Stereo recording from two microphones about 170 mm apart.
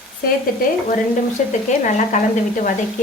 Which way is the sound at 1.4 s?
50° left (ahead or behind).